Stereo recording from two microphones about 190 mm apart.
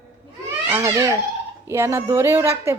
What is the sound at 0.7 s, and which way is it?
A woman's voice, 15° right (ahead or behind).